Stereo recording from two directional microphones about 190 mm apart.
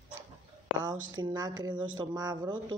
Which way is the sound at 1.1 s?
20° right (ahead or behind).